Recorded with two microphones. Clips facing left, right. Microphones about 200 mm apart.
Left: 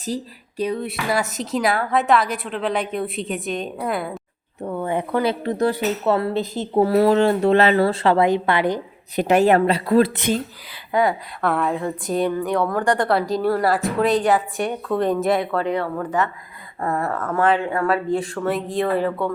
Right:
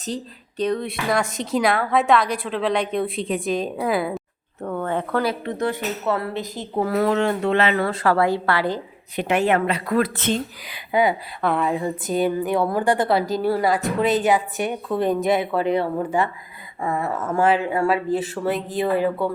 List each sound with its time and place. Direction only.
0.0 s speech: 10° left (ahead or behind)
4.6 s speech: 10° left (ahead or behind)
5.2 s speech: 30° left (ahead or behind)
9.1 s a woman's voice: 40° left (ahead or behind)
10.2 s speech: 10° left (ahead or behind)
10.9 s speech: centre (ahead or behind)
16.8 s speech: centre (ahead or behind)